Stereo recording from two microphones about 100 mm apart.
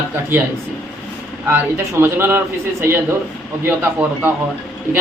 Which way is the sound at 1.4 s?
25° right (ahead or behind).